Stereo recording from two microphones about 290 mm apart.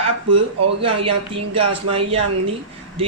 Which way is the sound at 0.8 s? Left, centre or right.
Centre.